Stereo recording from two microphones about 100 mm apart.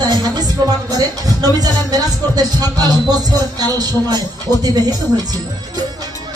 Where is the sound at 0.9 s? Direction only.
40° right (ahead or behind).